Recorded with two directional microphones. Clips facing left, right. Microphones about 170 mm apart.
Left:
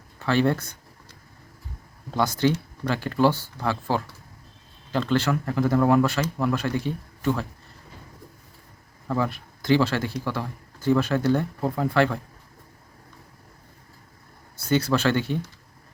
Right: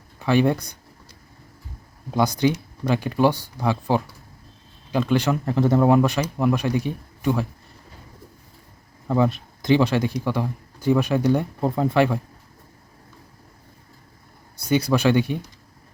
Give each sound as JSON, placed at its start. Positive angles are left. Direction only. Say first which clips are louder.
{"t": 0.2, "sound": "speech", "louder": "right 3 dB", "side_deg": -15}
{"t": 2.0, "sound": "speech", "louder": "right 2 dB", "side_deg": -15}
{"t": 9.0, "sound": "speech", "louder": "right 5 dB", "side_deg": -20}
{"t": 14.5, "sound": "speech", "louder": "right 2 dB", "side_deg": -15}